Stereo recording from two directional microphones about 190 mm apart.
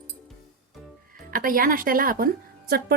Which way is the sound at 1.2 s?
50° right (ahead or behind).